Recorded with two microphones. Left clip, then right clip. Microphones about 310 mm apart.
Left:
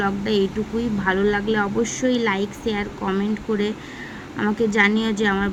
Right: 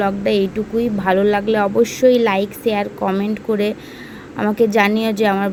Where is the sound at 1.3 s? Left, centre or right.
Right.